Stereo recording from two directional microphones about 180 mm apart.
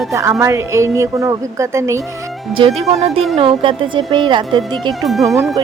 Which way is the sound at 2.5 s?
30° right (ahead or behind).